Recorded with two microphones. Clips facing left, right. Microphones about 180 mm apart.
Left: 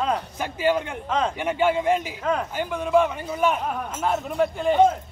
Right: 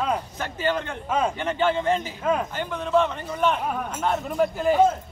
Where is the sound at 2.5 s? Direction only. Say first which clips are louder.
Left 2 dB; 10° left (ahead or behind).